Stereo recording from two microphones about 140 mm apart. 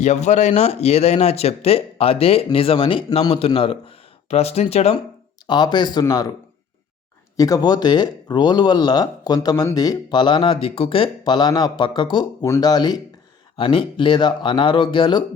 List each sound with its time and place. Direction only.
0.0 s speech: 55° left (ahead or behind)
5.5 s speech: 30° left (ahead or behind)
7.3 s speech: 25° left (ahead or behind)